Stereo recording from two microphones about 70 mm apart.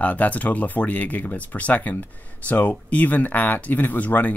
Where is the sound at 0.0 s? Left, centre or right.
Left.